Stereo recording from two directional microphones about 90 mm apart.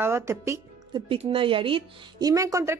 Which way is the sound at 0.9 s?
75° right (ahead or behind).